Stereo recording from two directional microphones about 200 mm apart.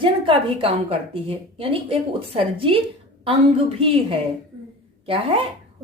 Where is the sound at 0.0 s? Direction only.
25° right (ahead or behind).